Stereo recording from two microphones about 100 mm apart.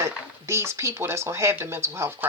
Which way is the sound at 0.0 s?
25° right (ahead or behind).